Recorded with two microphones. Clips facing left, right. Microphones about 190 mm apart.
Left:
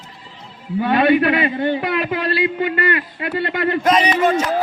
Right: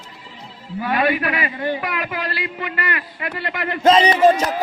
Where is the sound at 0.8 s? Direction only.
25° left (ahead or behind).